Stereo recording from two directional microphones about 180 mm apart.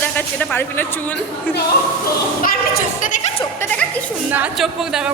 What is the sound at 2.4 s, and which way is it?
Speech, 50° left (ahead or behind).